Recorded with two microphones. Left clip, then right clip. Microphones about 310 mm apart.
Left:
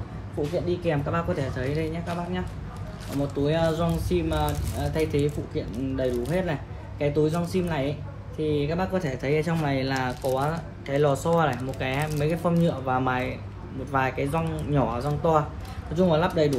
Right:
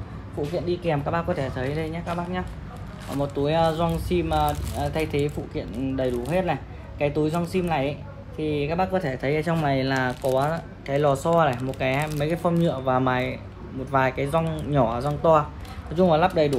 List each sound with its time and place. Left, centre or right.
0.8 s speech: right